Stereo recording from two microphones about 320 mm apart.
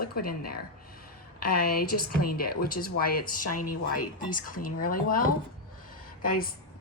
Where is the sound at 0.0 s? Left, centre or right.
Left.